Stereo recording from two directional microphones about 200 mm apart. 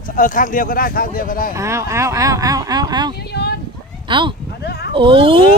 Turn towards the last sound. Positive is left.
turn(degrees=-25)  # may be behind; listen again after turning